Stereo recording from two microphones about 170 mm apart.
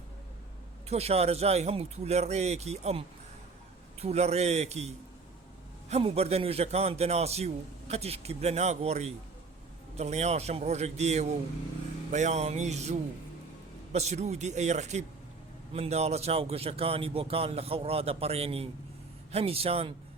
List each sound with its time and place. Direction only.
0.9 s a man's voice: 35° right (ahead or behind)
4.0 s a man's voice: 40° right (ahead or behind)